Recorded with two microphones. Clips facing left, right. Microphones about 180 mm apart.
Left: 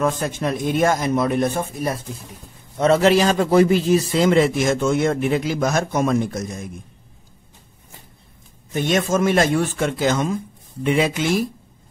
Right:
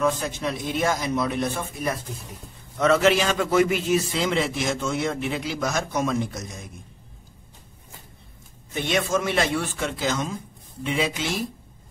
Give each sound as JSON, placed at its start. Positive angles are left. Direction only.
{"t": 0.0, "sound": "a man's voice", "side_deg": 50}
{"t": 8.7, "sound": "a man's voice", "side_deg": 45}